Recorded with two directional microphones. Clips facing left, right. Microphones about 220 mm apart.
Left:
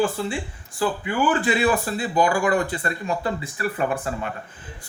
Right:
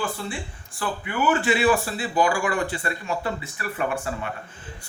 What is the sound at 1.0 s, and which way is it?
Speech, 35° left (ahead or behind).